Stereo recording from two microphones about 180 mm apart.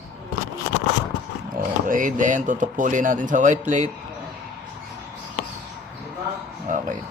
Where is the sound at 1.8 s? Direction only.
50° right (ahead or behind).